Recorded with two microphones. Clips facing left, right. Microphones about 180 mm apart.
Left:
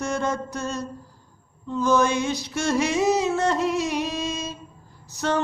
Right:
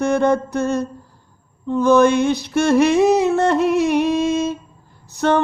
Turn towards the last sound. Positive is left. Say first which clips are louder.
# right 7 dB
turn(degrees=-60)  # may be behind; listen again after turning